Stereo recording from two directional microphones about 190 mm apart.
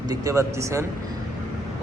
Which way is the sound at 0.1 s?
15° right (ahead or behind).